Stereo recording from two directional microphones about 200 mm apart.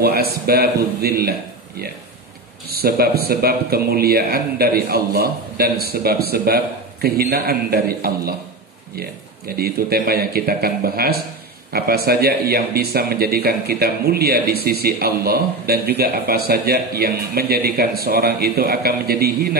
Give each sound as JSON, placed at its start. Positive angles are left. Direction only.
{"t": 0.0, "sound": "speech", "side_deg": -50}
{"t": 2.7, "sound": "speech", "side_deg": -50}
{"t": 9.6, "sound": "speech", "side_deg": -50}